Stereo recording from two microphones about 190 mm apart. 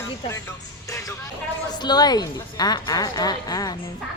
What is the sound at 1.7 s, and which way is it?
A woman's voice, 20° left (ahead or behind).